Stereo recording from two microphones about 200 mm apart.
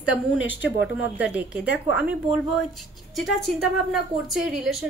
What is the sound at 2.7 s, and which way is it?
A woman's voice, centre (ahead or behind).